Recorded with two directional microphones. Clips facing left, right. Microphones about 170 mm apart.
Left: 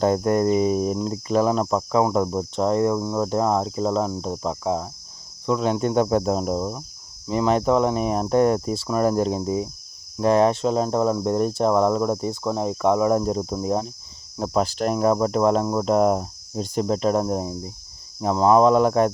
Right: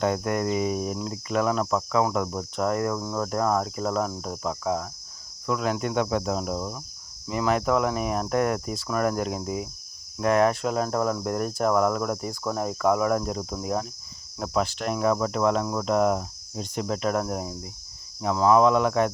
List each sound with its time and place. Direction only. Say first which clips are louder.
0.0 s cricket: left 6 dB; 35° left (ahead or behind)
5.5 s speech: left 5 dB; 30° left (ahead or behind)
7.3 s cricket: left 4 dB; 30° left (ahead or behind)
14.3 s speech: left 4 dB; 35° left (ahead or behind)